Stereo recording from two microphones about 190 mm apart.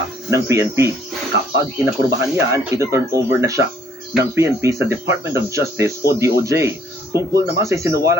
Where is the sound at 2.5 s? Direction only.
15° right (ahead or behind).